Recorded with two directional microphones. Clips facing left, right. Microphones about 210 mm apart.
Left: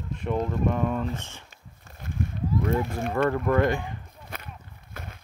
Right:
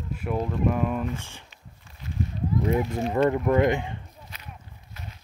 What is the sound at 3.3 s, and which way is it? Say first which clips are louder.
Speech: right 2 dB; 15° right (ahead or behind).